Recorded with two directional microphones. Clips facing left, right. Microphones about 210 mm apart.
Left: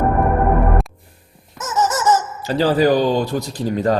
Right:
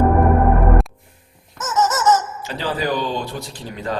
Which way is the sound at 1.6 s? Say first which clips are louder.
Even; 15° left (ahead or behind).